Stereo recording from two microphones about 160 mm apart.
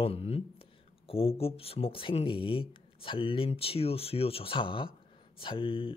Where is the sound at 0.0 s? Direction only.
40° left (ahead or behind).